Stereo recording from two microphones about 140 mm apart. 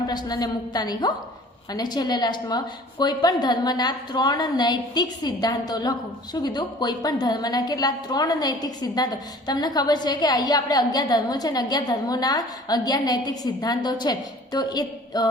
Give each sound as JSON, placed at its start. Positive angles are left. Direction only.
{"t": 0.1, "sound": "a woman's voice", "side_deg": 30}